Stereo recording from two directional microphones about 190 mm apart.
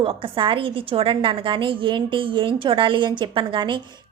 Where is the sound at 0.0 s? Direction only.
25° right (ahead or behind).